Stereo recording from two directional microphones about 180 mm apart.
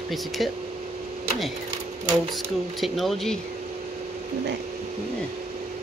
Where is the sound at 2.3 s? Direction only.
Centre (ahead or behind).